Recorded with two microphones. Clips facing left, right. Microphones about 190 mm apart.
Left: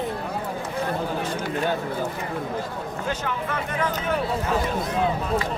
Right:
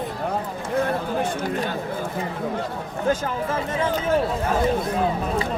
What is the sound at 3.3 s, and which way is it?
Speech, 25° right (ahead or behind).